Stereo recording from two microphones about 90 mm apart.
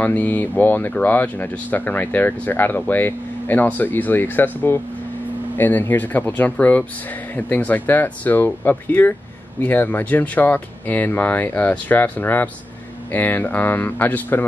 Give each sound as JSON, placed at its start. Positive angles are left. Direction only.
{"t": 0.0, "sound": "speech", "side_deg": 20}